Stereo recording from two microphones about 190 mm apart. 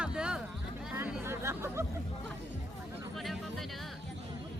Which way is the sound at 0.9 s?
10° right (ahead or behind).